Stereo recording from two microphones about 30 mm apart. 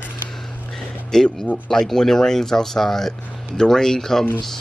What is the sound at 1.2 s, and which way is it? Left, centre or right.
Speech, left.